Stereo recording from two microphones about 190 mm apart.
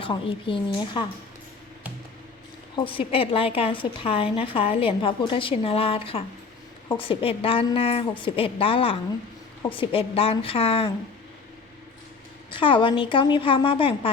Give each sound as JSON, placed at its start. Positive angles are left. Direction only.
{"t": 0.0, "sound": "a woman's voice", "side_deg": 25}
{"t": 2.7, "sound": "a woman's voice", "side_deg": 25}
{"t": 12.5, "sound": "a woman's voice", "side_deg": 25}